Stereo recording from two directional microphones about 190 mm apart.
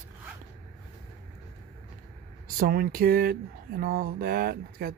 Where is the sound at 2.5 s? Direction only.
50° right (ahead or behind).